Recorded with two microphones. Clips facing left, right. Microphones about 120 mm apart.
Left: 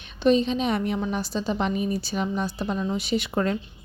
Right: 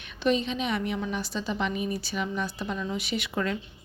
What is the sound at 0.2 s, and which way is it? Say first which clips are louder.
A woman's voice: left 5 dB; 35° left (ahead or behind).